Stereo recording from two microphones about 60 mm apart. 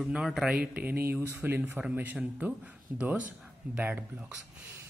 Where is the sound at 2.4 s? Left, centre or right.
Right.